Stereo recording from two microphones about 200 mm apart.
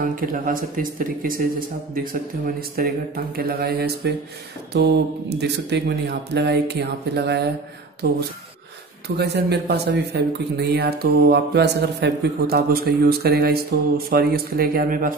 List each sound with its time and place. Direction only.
0.0 s speech: 45° right (ahead or behind)
5.4 s speech: 55° right (ahead or behind)
9.2 s speech: 55° right (ahead or behind)